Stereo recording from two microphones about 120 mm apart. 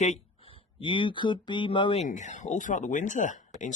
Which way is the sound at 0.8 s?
45° left (ahead or behind).